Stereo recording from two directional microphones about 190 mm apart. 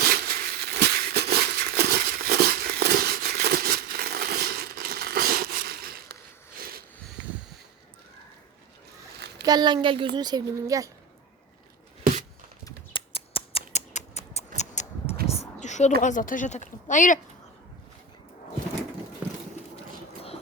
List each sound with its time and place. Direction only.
0.0 s a sound: 55° right (ahead or behind)
6.6 s sniff: 50° right (ahead or behind)
9.4 s speech: 20° right (ahead or behind)
12.6 s scissors: 30° left (ahead or behind)
15.3 s a sound: 35° left (ahead or behind)
16.0 s speech: 40° left (ahead or behind)